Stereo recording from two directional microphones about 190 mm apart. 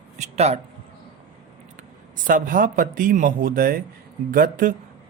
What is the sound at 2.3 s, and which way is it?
Speech, 45° right (ahead or behind).